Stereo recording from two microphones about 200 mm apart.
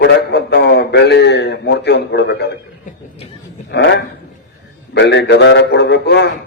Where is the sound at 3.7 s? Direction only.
60° left (ahead or behind).